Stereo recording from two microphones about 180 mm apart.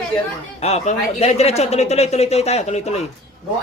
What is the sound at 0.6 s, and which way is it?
A man's voice, 35° left (ahead or behind).